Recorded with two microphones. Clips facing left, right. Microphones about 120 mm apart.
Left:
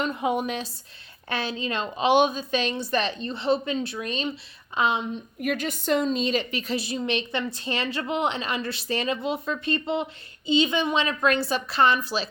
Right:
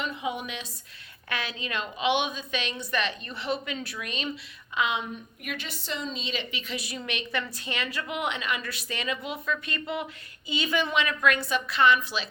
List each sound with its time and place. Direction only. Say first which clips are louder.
0.0 s speech: left 6 dB; 45° left (ahead or behind)
1.3 s a woman's voice: left 5 dB; 30° left (ahead or behind)